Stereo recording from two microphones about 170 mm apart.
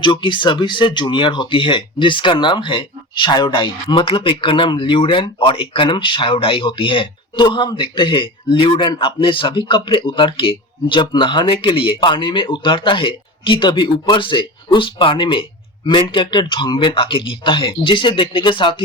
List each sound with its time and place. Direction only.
0.0 s speech: 30° left (ahead or behind)